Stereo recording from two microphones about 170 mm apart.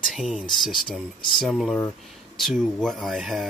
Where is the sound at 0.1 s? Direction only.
Centre (ahead or behind).